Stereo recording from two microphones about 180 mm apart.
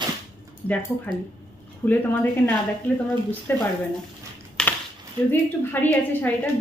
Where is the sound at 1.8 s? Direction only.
15° left (ahead or behind).